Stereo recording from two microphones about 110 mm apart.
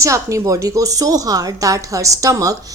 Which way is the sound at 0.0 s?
30° right (ahead or behind).